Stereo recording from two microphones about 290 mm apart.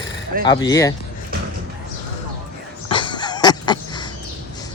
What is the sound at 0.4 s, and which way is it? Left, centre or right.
Speech, centre.